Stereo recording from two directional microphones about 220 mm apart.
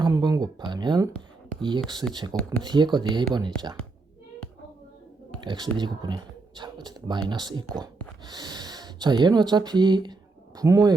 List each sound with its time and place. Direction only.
0.0 s speech: 15° right (ahead or behind)
5.4 s speech: 20° right (ahead or behind)